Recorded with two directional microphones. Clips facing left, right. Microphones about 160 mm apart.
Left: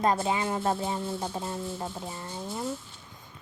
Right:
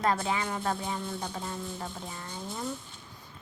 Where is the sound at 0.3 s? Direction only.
25° left (ahead or behind).